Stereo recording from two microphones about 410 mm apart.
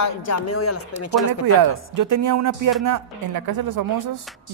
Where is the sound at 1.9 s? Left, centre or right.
Right.